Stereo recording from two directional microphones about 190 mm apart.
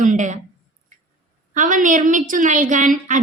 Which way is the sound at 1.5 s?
45° right (ahead or behind).